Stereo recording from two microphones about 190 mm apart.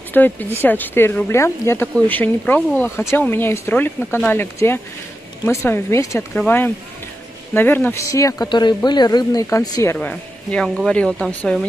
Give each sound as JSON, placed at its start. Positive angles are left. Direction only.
{"t": 0.1, "sound": "speech", "side_deg": 10}
{"t": 9.9, "sound": "speech", "side_deg": 5}